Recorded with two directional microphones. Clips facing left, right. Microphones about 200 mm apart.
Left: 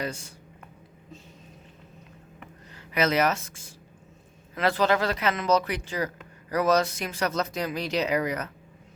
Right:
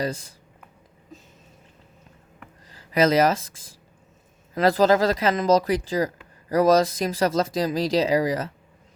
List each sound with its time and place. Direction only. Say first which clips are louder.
0.0 s speech: right 5 dB; 35° right (ahead or behind)
2.7 s speech: right 5 dB; 35° right (ahead or behind)